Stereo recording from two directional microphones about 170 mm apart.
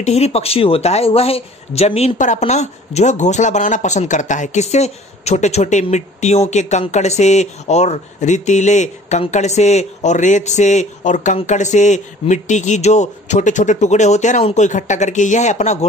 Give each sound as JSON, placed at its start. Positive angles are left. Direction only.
{"t": 0.0, "sound": "speech", "side_deg": 40}